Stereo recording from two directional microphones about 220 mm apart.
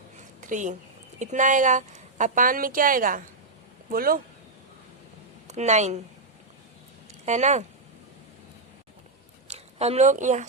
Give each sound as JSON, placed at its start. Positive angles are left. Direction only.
{"t": 0.4, "sound": "a woman's voice", "side_deg": -35}
{"t": 5.5, "sound": "a woman's voice", "side_deg": -30}
{"t": 7.3, "sound": "a woman's voice", "side_deg": -30}
{"t": 9.5, "sound": "speech", "side_deg": -30}